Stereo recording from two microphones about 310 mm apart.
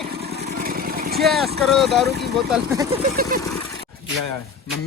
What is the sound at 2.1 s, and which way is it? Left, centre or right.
Speech, right.